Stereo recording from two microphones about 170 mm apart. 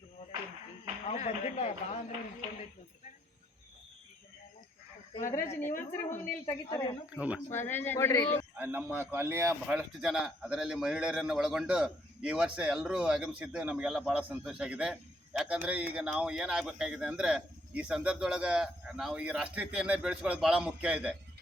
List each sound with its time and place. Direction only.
1.0 s a man's voice: 40° left (ahead or behind)
5.6 s a woman's voice: 50° left (ahead or behind)
6.4 s a woman's voice: 20° left (ahead or behind)
7.2 s speech: 5° right (ahead or behind)
7.5 s speech: 15° left (ahead or behind)
8.5 s speech: 10° right (ahead or behind)
9.5 s a man's voice: 5° right (ahead or behind)